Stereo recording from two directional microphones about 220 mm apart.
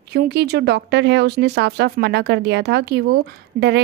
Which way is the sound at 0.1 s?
50° right (ahead or behind).